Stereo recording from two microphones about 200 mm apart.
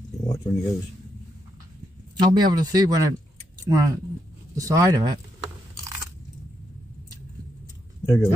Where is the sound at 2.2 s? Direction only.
20° right (ahead or behind).